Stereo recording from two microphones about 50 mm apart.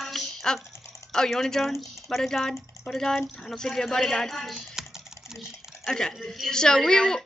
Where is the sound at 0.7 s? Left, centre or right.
Left.